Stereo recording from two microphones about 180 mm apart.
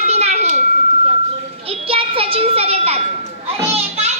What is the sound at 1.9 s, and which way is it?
Music, 30° right (ahead or behind).